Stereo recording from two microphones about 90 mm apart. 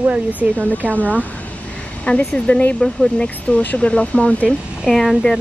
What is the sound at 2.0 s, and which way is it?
Speech, 15° left (ahead or behind).